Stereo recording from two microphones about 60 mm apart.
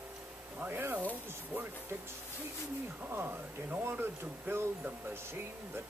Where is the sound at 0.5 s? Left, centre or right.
Right.